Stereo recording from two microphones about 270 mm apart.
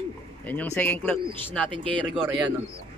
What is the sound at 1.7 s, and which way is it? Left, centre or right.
Speech, centre.